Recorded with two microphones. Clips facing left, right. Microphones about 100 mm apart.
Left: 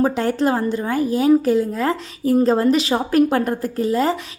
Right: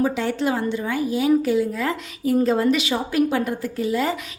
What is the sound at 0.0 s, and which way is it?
A woman's voice, 40° left (ahead or behind).